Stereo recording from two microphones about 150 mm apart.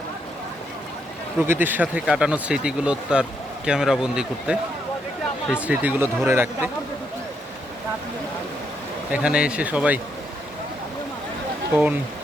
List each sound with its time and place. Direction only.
1.4 s speech: 15° right (ahead or behind)
9.1 s speech: 5° right (ahead or behind)